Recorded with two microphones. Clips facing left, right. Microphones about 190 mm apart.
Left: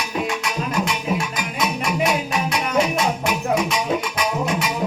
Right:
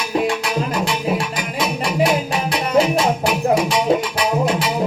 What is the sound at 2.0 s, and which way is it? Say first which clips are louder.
Music: right 3 dB; 30° right (ahead or behind).